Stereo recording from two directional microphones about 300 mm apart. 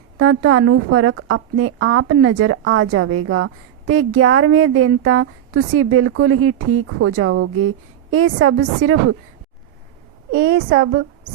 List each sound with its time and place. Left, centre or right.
0.2 s a woman's voice: right
10.3 s a woman's voice: right